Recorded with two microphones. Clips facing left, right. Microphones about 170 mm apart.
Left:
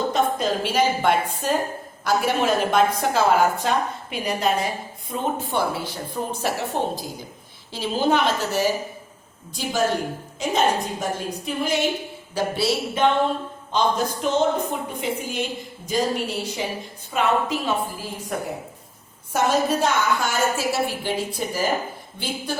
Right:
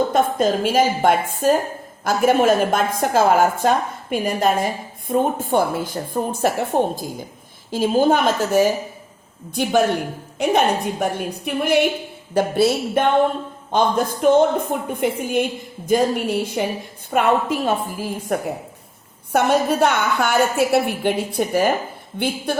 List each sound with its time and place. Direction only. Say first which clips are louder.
0.1 s a woman's voice: right 4 dB; 50° right (ahead or behind)
9.6 s a woman's voice: right 5 dB; 60° right (ahead or behind)